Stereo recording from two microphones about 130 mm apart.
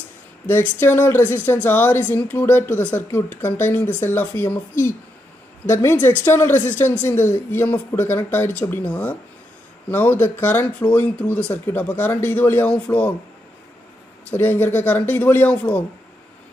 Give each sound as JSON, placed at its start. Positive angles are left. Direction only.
{"t": 0.5, "sound": "speech", "side_deg": 15}
{"t": 14.3, "sound": "speech", "side_deg": 15}